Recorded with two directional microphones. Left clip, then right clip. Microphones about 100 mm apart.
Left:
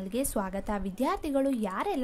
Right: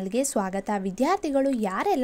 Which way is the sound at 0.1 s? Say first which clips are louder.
Right 5 dB; 35° right (ahead or behind).